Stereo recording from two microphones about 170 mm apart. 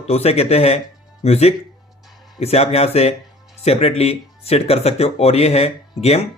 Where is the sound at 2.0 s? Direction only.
Centre (ahead or behind).